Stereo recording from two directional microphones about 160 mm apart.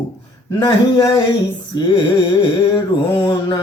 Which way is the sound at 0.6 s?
25° left (ahead or behind).